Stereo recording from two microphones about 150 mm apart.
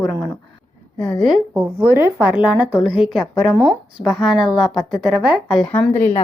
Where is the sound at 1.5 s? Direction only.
15° right (ahead or behind); by 5.8 s 5° left (ahead or behind).